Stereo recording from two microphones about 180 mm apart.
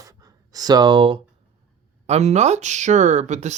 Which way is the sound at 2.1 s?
40° right (ahead or behind).